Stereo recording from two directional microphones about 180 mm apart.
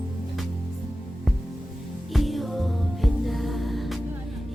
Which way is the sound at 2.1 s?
Centre (ahead or behind).